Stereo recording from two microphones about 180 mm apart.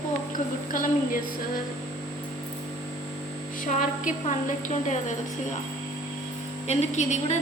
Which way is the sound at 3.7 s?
45° left (ahead or behind).